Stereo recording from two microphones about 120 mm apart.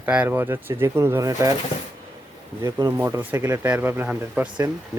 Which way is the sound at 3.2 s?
15° right (ahead or behind).